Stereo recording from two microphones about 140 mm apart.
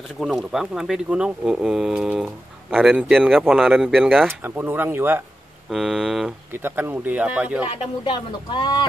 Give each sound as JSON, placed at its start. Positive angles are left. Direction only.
{"t": 0.2, "sound": "speech", "side_deg": -5}
{"t": 4.3, "sound": "speech", "side_deg": -15}
{"t": 5.7, "sound": "speech", "side_deg": 0}
{"t": 6.5, "sound": "speech", "side_deg": -15}
{"t": 7.7, "sound": "speech", "side_deg": 35}